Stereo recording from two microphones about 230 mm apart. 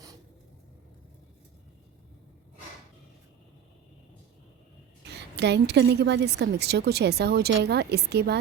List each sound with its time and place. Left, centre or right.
5.0 s a woman's voice: right